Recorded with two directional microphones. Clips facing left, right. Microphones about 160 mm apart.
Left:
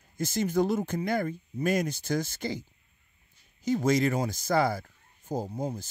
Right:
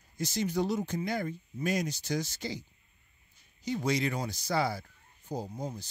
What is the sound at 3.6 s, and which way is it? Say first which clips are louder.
Speech: left 6 dB; 45° left (ahead or behind).